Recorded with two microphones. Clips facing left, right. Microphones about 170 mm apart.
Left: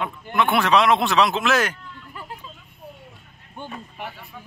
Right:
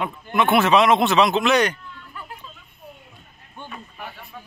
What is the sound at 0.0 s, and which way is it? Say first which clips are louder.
Speech: right 1 dB; centre (ahead or behind).